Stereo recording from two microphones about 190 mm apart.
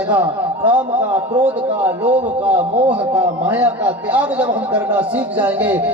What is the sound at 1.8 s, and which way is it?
Speech, 5° right (ahead or behind).